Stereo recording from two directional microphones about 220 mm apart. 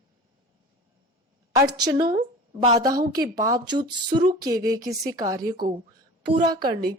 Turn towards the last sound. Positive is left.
turn(degrees=-20)  # may be behind; listen again after turning